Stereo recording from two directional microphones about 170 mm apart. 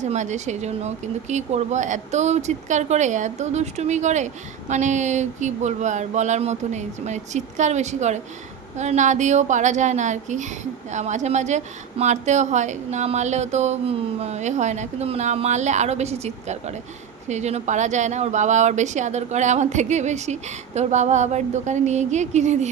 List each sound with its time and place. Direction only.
0.0 s a woman's voice: 45° right (ahead or behind)